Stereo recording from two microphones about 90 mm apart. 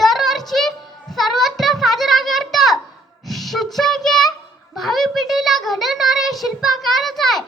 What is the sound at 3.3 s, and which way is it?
Child singing, centre (ahead or behind).